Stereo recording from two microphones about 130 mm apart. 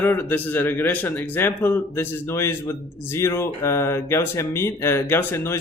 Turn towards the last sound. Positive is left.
turn(degrees=15)  # may be behind; listen again after turning